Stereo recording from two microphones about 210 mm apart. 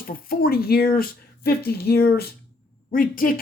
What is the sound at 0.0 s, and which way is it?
Speech, 45° left (ahead or behind).